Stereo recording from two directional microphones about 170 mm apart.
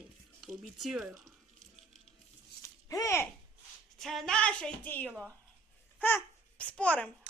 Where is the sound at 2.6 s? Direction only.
20° left (ahead or behind).